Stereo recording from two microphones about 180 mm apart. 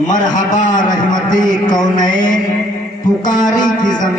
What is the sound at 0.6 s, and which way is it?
Speech, 45° left (ahead or behind).